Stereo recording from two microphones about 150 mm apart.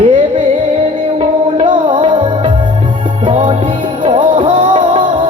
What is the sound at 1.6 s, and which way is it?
Music, 35° right (ahead or behind).